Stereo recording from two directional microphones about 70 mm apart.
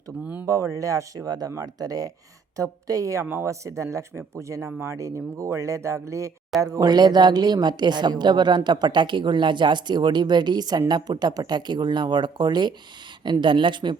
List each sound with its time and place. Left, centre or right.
0.4 s speech: right
6.6 s speech: right